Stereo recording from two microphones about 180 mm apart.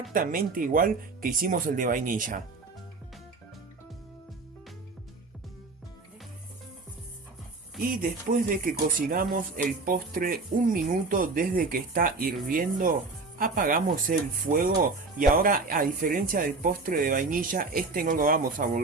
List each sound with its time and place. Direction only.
0.1 s speech: 50° right (ahead or behind)
7.8 s speech: 50° right (ahead or behind)